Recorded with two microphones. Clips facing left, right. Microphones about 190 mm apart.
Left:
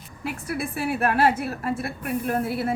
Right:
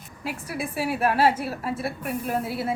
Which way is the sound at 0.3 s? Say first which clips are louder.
Left 2 dB; 55° left (ahead or behind).